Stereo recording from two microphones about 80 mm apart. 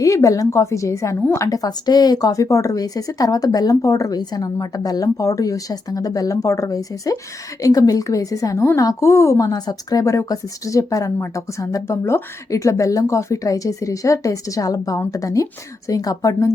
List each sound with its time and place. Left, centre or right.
0.0 s speech: left
9.5 s speech: left